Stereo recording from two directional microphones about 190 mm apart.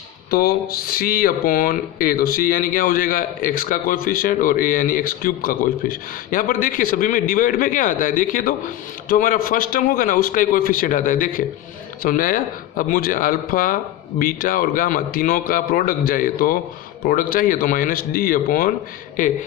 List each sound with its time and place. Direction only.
0.3 s speech: 55° left (ahead or behind)